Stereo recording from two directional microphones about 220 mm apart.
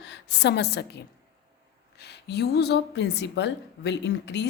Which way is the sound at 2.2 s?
45° left (ahead or behind).